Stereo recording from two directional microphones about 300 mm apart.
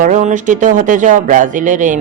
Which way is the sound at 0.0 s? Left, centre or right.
Right.